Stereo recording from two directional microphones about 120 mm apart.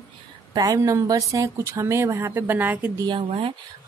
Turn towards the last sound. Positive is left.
turn(degrees=-45)  # may be behind; listen again after turning